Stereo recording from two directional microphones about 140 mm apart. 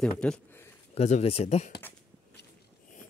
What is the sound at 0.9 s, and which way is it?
Speech, 50° left (ahead or behind).